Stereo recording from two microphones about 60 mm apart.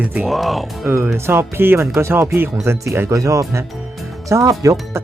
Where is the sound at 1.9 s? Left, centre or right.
Right.